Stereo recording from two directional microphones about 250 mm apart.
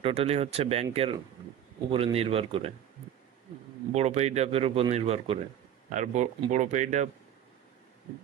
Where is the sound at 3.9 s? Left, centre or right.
Right.